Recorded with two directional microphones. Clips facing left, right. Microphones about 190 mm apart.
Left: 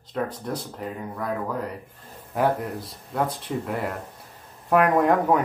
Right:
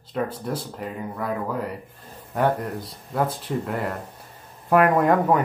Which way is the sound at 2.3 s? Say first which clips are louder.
Right 1 dB; 5° left (ahead or behind).